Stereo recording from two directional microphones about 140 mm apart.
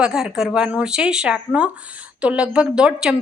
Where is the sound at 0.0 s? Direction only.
5° right (ahead or behind).